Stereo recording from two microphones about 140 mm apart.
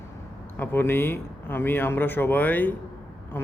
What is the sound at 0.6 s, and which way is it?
Speech, 15° left (ahead or behind).